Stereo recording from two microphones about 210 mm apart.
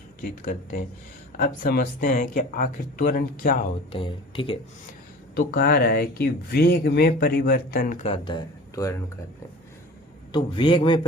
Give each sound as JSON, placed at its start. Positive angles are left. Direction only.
{"t": 1.4, "sound": "speech", "side_deg": 40}
{"t": 3.9, "sound": "speech", "side_deg": 25}
{"t": 5.3, "sound": "speech", "side_deg": 45}
{"t": 10.3, "sound": "speech", "side_deg": 25}